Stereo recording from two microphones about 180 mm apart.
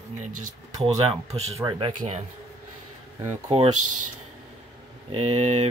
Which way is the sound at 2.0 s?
40° right (ahead or behind).